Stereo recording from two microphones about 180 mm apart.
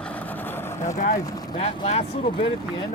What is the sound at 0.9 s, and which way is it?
Speech, 50° left (ahead or behind).